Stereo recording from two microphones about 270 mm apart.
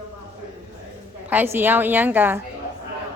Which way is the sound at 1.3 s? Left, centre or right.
Centre.